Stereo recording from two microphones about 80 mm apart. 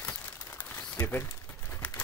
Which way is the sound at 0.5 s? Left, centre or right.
Left.